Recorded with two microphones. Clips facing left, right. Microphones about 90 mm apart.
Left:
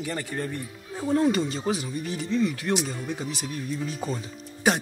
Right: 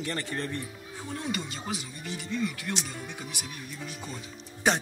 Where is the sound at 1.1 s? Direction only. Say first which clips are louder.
Left 12 dB; 35° left (ahead or behind).